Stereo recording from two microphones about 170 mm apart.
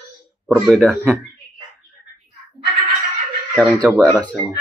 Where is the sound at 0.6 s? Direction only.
Centre (ahead or behind).